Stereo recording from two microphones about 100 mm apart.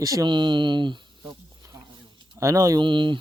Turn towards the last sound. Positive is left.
turn(degrees=-55)  # may be behind; listen again after turning